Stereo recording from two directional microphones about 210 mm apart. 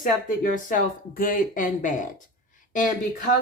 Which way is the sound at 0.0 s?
40° left (ahead or behind).